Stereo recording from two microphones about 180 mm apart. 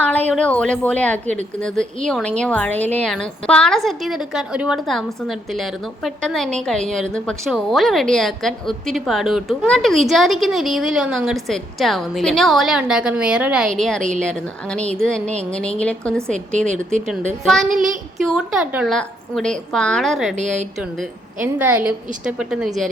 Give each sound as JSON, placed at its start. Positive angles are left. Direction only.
{"t": 0.0, "sound": "a woman's voice", "side_deg": 10}
{"t": 16.6, "sound": "a woman's voice", "side_deg": -40}
{"t": 17.4, "sound": "a woman's voice", "side_deg": 0}
{"t": 17.7, "sound": "child singing", "side_deg": -50}
{"t": 18.3, "sound": "a woman's voice", "side_deg": -5}
{"t": 18.9, "sound": "a woman's voice", "side_deg": 5}
{"t": 20.3, "sound": "a woman's voice", "side_deg": -40}
{"t": 21.4, "sound": "a woman's voice", "side_deg": -10}